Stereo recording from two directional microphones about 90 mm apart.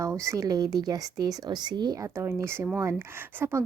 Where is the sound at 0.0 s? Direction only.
35° right (ahead or behind); by 2.0 s 50° right (ahead or behind).